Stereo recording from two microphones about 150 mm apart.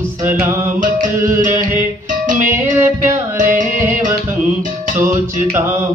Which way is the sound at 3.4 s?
60° right (ahead or behind).